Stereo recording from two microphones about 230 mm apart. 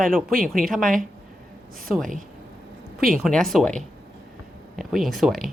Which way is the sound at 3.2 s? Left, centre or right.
Centre.